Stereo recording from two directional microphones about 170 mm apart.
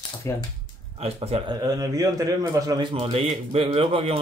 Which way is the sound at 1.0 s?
35° right (ahead or behind).